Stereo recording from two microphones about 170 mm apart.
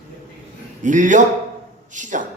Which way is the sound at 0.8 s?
50° right (ahead or behind).